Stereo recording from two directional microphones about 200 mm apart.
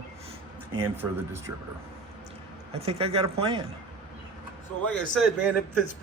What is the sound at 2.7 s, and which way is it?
Speech, 30° right (ahead or behind).